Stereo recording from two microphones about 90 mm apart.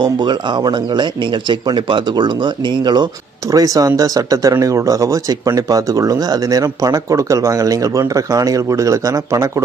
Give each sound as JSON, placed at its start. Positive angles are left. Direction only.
{"t": 0.0, "sound": "speech", "side_deg": -55}
{"t": 3.5, "sound": "speech", "side_deg": -40}